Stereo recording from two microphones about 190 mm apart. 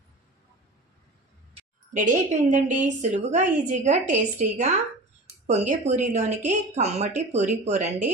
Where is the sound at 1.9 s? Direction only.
40° right (ahead or behind).